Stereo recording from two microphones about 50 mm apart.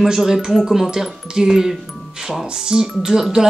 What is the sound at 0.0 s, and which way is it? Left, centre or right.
Speech, centre.